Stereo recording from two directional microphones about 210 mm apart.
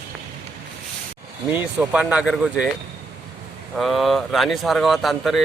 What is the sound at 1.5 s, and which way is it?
Speech, 10° right (ahead or behind).